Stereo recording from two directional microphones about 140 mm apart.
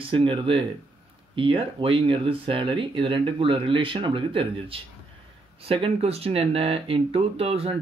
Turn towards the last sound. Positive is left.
turn(degrees=-45)  # may be behind; listen again after turning